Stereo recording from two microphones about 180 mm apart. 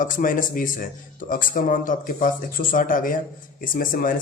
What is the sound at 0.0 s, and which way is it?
Speech, 50° left (ahead or behind).